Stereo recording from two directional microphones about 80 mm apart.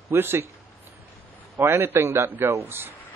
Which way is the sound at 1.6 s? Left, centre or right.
Right.